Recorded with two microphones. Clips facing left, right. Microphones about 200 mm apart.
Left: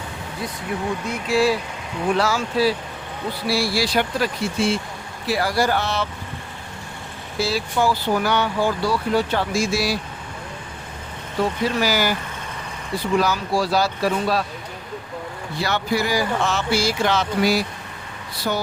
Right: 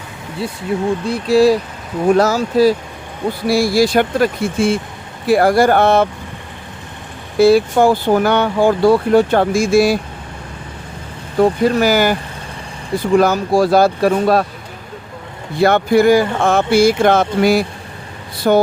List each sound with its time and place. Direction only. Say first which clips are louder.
0.7 s speech: right 8 dB; 25° right (ahead or behind); by 6.1 s 55° right (ahead or behind)
7.3 s speech: right 12 dB; 55° right (ahead or behind)
11.3 s speech: right 9 dB; 50° right (ahead or behind)
13.1 s speech: right 8 dB; 50° right (ahead or behind)
15.5 s speech: right 11 dB; 55° right (ahead or behind)